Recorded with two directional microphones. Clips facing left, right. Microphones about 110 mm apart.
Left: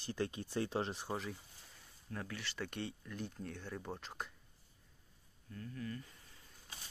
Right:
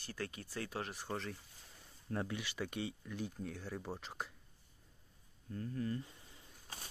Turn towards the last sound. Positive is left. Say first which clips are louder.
# right 5 dB
turn(degrees=-30)  # may be behind; listen again after turning